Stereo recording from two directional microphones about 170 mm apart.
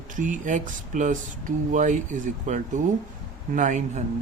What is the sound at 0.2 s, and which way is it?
Speech, 50° right (ahead or behind).